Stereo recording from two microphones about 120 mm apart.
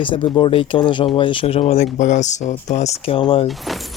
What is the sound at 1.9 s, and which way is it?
Speech, 90° left.